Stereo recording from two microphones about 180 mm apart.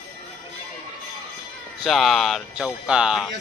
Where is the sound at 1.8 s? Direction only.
Centre (ahead or behind).